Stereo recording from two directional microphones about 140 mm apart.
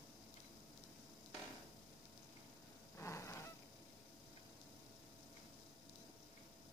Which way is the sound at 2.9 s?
20° left (ahead or behind).